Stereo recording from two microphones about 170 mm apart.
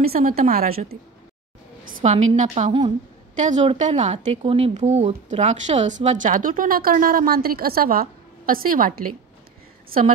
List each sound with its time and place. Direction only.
0.1 s a woman's voice: 60° right (ahead or behind)
1.9 s speech: 50° right (ahead or behind)